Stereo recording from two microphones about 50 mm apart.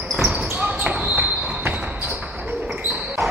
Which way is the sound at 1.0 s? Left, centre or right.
Right.